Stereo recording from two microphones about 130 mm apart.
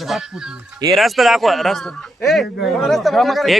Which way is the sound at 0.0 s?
Centre (ahead or behind).